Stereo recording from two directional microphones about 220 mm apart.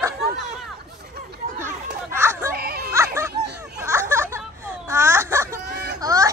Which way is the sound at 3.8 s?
10° right (ahead or behind).